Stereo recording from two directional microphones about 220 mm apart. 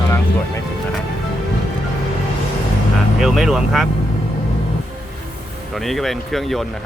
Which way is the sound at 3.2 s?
Centre (ahead or behind).